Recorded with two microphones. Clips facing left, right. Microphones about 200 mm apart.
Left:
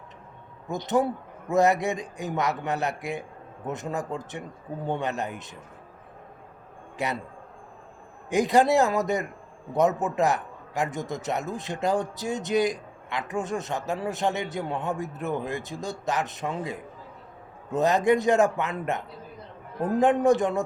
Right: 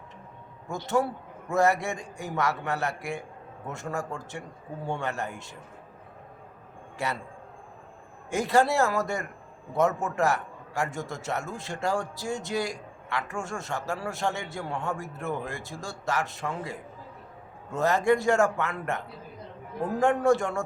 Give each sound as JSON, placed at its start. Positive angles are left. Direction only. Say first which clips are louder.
{"t": 0.7, "sound": "a man's voice", "louder": "left 2 dB", "side_deg": 20}
{"t": 7.0, "sound": "a man's voice", "louder": "left 2 dB", "side_deg": 20}
{"t": 8.3, "sound": "a man's voice", "louder": "left 3 dB", "side_deg": 15}